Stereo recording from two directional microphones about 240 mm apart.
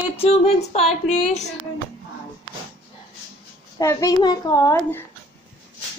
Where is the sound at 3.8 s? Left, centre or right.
Centre.